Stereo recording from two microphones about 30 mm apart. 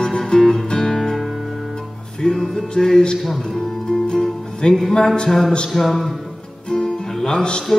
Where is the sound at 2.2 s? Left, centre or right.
Left.